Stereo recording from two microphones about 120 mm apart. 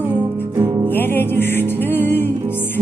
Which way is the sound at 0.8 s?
15° left (ahead or behind).